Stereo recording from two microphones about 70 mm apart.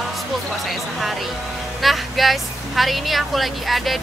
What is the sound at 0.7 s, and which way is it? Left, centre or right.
A woman's voice, centre.